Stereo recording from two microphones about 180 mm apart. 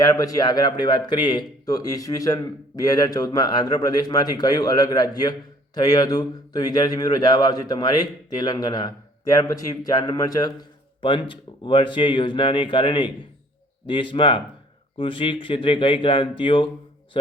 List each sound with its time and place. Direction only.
0.0 s a man's voice: 20° left (ahead or behind)